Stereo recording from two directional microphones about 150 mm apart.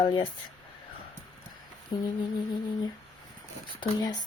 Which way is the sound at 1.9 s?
30° left (ahead or behind).